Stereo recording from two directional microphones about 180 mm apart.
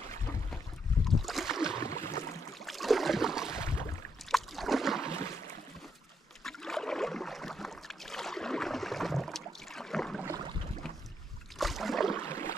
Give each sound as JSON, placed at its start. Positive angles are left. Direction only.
{"t": 1.0, "sound": "boat", "side_deg": 0}
{"t": 1.8, "sound": "boat", "side_deg": 20}
{"t": 2.6, "sound": "boat", "side_deg": 0}
{"t": 3.5, "sound": "boat", "side_deg": 15}
{"t": 4.3, "sound": "boat", "side_deg": 0}
{"t": 6.4, "sound": "boat", "side_deg": 0}
{"t": 10.2, "sound": "a sound", "side_deg": -20}
{"t": 11.5, "sound": "rowboat", "side_deg": 0}
{"t": 12.3, "sound": "a sound", "side_deg": 15}